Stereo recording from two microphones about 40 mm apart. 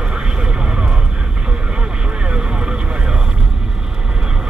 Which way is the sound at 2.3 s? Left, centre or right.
Right.